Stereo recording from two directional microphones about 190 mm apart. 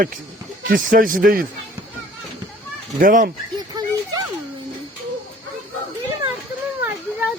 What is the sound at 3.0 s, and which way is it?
Speech, 45° right (ahead or behind).